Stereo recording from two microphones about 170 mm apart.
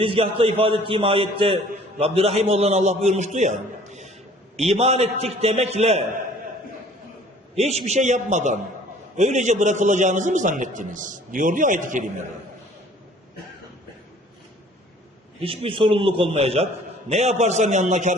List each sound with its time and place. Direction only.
0.0 s a man's voice: 30° right (ahead or behind)
7.5 s a man's voice: 40° right (ahead or behind)
15.4 s a man's voice: 35° right (ahead or behind)